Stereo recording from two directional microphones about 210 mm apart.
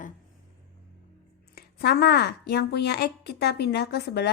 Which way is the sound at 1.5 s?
50° left (ahead or behind).